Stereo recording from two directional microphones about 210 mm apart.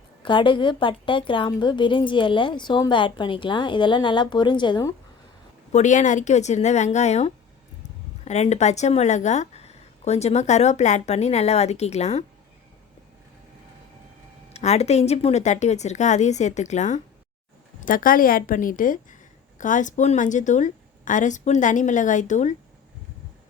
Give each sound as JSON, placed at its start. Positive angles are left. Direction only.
{"t": 0.2, "sound": "a woman's voice", "side_deg": 25}
{"t": 5.7, "sound": "speech", "side_deg": 35}
{"t": 14.5, "sound": "speech", "side_deg": 30}